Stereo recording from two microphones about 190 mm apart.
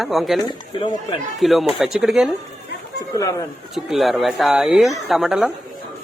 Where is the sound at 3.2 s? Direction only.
15° left (ahead or behind).